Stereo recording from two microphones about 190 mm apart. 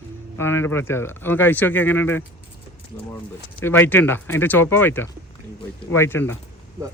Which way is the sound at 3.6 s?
10° left (ahead or behind).